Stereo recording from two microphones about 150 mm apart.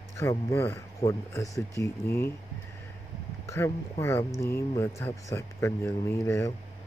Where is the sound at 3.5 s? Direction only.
20° left (ahead or behind).